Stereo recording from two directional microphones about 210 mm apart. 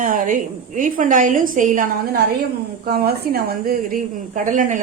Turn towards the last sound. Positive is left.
turn(degrees=-40)  # may be behind; listen again after turning